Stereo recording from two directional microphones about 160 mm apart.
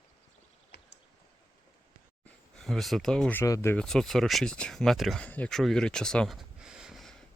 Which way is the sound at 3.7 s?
5° left (ahead or behind).